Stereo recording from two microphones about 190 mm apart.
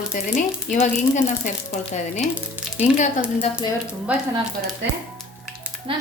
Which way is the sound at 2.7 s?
40° left (ahead or behind).